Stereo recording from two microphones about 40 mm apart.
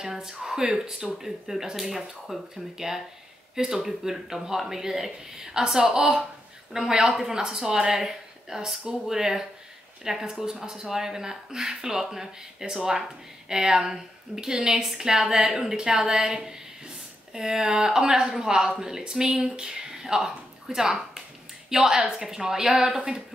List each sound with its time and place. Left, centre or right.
0.0 s speech: centre
2.8 s a woman's voice: centre